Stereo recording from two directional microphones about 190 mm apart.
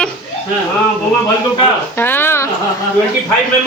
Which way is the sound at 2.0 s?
10° left (ahead or behind).